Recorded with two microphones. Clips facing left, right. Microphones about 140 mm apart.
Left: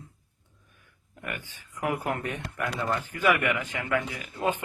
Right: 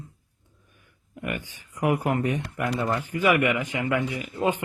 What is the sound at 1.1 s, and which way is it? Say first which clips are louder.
Speech: right 6 dB; 15° right (ahead or behind).